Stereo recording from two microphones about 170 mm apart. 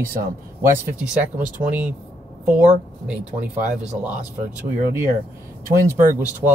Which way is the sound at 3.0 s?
10° right (ahead or behind).